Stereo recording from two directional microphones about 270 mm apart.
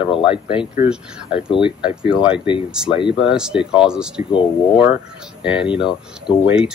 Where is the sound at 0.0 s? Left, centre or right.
Centre.